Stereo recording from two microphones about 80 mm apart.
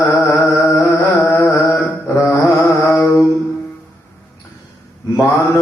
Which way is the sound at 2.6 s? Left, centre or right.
Left.